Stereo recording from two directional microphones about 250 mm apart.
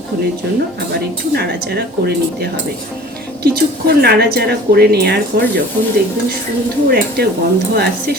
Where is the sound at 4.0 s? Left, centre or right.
Right.